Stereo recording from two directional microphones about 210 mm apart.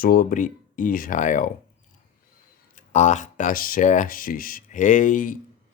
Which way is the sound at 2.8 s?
35° left (ahead or behind).